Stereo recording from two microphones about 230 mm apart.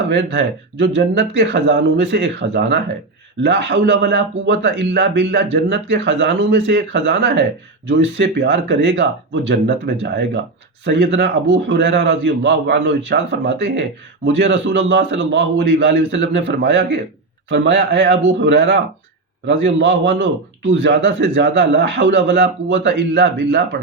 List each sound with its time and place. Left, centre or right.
0.1 s a man's voice: right